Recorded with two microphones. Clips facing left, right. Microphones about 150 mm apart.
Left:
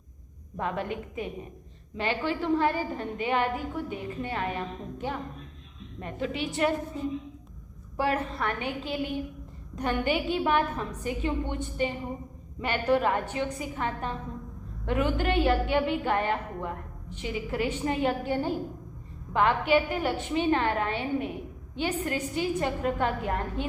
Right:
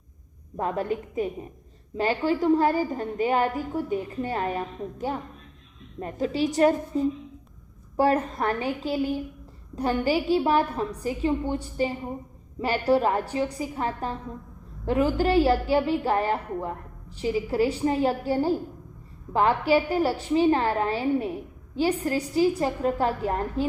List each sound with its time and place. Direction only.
0.5 s a woman's voice: 40° right (ahead or behind)